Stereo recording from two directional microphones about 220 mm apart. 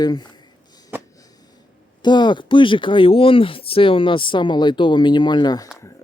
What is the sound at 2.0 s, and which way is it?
Speech, 20° left (ahead or behind).